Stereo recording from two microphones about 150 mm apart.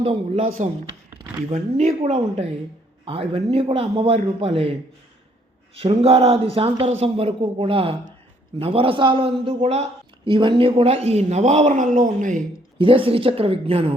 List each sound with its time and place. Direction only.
0.0 s a man's voice: 40° right (ahead or behind)
0.4 s speech: 70° right (ahead or behind)
1.5 s a man's voice: 50° right (ahead or behind)
5.7 s a man's voice: 40° right (ahead or behind)
10.3 s a man's voice: 35° right (ahead or behind); by 12.4 s 60° right (ahead or behind)
12.8 s a man's voice: 35° right (ahead or behind)